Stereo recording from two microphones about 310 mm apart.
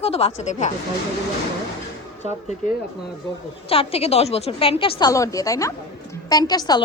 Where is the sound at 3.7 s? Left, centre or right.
Centre.